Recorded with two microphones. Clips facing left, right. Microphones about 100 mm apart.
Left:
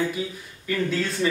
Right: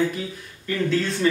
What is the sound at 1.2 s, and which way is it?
Speech, 15° left (ahead or behind).